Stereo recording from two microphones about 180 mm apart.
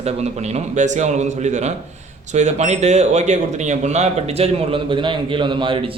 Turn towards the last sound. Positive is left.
turn(degrees=-25)  # may be behind; listen again after turning